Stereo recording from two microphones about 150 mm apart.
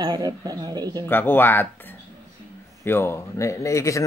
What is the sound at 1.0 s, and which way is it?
Speech, 15° left (ahead or behind).